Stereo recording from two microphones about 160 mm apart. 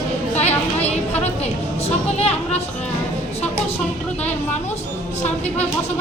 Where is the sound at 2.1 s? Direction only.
40° left (ahead or behind).